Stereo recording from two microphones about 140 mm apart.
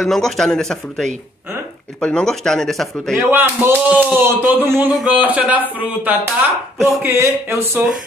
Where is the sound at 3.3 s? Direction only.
15° right (ahead or behind).